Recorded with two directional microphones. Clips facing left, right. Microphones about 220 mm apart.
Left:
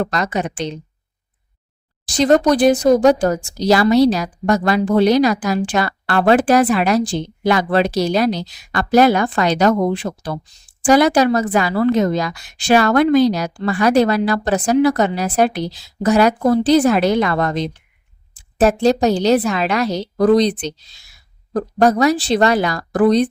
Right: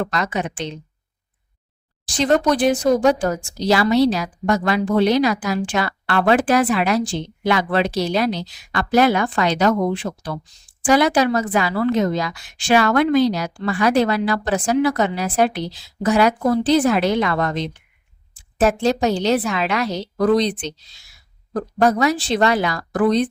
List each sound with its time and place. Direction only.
0.0 s speech: 40° left (ahead or behind)
2.1 s speech: 40° left (ahead or behind)